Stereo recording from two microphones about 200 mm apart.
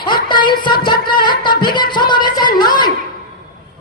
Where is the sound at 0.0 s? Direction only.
25° left (ahead or behind).